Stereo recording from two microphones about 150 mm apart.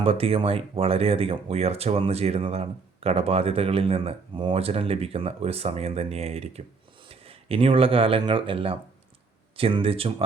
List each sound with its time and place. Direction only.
0.0 s speech: 40° right (ahead or behind)